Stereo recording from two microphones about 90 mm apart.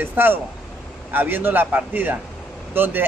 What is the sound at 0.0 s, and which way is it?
A man's voice, 20° right (ahead or behind).